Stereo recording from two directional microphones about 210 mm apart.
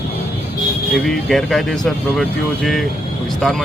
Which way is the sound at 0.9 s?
Centre (ahead or behind).